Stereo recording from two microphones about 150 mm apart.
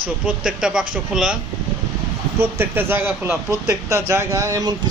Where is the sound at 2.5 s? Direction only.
15° right (ahead or behind).